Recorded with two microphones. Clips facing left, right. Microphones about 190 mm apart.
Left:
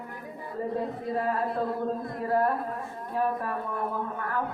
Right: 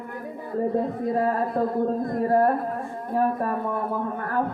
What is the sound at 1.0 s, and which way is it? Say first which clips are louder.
A woman's voice: right 5 dB; 45° right (ahead or behind).